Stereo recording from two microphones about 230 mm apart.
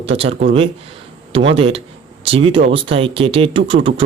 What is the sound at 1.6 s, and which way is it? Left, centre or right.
Speech, right.